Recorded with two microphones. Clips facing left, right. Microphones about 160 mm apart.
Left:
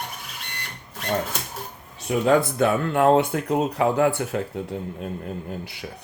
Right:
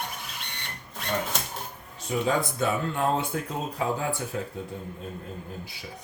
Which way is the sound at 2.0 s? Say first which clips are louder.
Left 7 dB; 65° left (ahead or behind).